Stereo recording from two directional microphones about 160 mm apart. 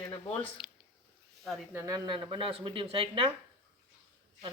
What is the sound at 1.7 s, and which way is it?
Speech, 20° right (ahead or behind).